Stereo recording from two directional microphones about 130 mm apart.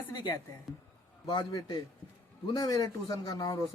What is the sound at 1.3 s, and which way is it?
A man's voice, 35° left (ahead or behind).